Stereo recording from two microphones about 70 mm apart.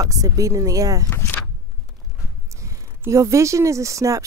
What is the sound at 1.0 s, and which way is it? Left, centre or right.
Speech, left.